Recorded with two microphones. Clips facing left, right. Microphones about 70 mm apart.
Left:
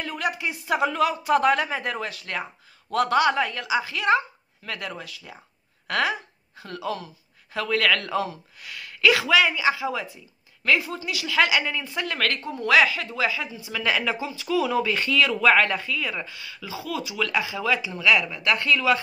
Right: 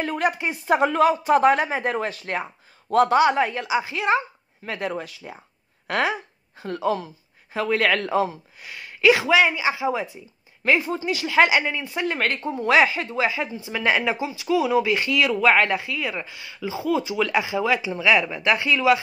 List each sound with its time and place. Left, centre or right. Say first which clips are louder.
0.0 s speech: right 4 dB; right
11.6 s speech: right 3 dB; centre